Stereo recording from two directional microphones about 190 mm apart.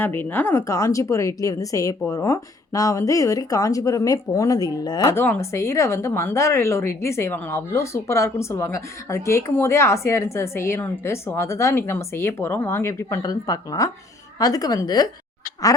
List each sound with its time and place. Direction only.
0.0 s a woman's voice: 10° left (ahead or behind)